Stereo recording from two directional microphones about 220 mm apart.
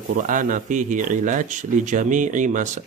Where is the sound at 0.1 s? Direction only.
35° right (ahead or behind).